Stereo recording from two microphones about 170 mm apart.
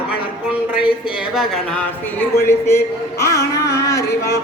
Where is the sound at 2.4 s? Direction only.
15° left (ahead or behind).